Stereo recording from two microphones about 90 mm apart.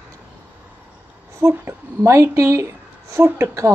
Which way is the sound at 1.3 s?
35° right (ahead or behind).